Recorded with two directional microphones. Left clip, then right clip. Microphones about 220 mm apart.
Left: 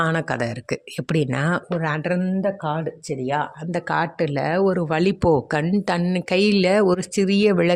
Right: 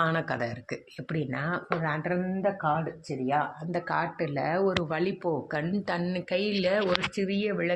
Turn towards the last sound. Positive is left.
turn(degrees=60)  # may be behind; listen again after turning